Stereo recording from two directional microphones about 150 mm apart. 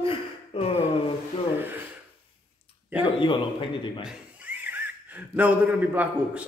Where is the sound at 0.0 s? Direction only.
40° left (ahead or behind).